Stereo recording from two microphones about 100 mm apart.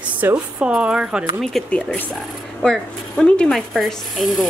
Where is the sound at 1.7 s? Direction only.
15° left (ahead or behind); by 4.5 s centre (ahead or behind).